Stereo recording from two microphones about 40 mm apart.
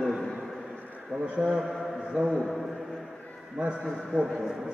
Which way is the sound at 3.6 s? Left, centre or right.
Right.